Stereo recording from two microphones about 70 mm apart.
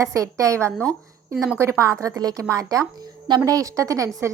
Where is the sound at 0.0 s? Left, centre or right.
Right.